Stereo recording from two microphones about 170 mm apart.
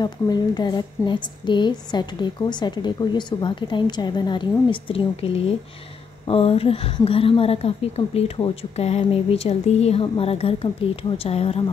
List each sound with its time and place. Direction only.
0.0 s a woman's voice: 25° left (ahead or behind)